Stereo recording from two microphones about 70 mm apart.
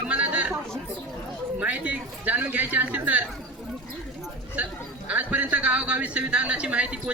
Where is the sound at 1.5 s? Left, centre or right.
Right.